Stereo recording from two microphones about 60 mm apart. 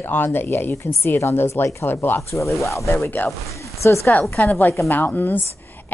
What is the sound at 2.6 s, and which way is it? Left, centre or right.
Speech, left.